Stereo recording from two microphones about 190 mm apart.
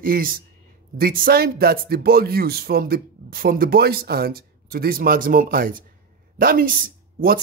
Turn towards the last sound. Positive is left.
turn(degrees=-50)  # may be behind; listen again after turning